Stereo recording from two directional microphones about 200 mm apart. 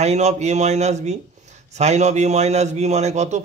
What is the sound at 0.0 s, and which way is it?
A man's voice, 35° right (ahead or behind).